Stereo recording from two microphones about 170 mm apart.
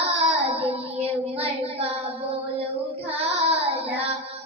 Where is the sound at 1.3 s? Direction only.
35° right (ahead or behind).